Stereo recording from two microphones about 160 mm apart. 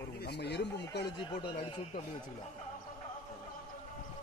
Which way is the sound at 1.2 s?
35° left (ahead or behind).